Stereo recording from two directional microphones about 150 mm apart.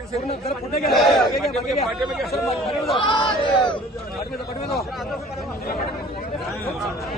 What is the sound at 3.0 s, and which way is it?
Speech, 35° left (ahead or behind).